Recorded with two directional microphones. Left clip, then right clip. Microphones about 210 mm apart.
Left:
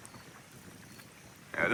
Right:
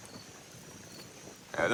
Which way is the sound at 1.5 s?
10° right (ahead or behind).